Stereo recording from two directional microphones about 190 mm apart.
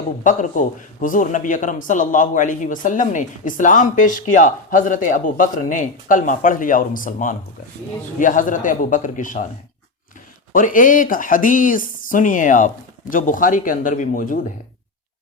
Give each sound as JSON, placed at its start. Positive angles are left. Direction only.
{"t": 0.3, "sound": "a man's voice", "side_deg": 40}
{"t": 10.5, "sound": "a man's voice", "side_deg": 45}